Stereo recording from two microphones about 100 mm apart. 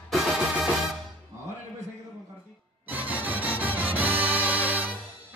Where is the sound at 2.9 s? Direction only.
15° right (ahead or behind).